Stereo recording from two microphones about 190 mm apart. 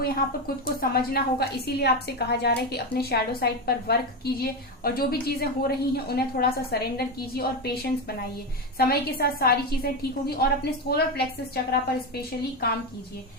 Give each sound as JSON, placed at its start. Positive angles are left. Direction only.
{"t": 0.0, "sound": "a woman's voice", "side_deg": 50}